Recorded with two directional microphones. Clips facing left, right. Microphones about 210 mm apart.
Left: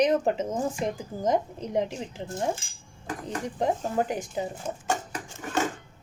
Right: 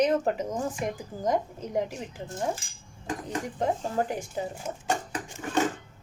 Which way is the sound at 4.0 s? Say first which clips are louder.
Left 1 dB; 20° left (ahead or behind).